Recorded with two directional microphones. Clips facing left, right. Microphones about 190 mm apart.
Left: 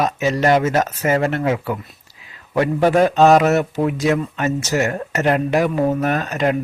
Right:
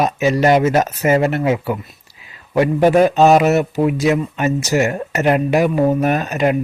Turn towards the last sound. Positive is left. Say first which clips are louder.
# right 2 dB
turn(degrees=-10)  # may be behind; listen again after turning